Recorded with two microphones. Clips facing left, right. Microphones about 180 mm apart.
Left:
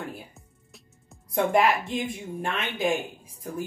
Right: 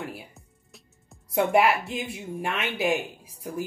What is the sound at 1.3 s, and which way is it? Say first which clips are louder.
A woman's voice: right 1 dB; 10° right (ahead or behind).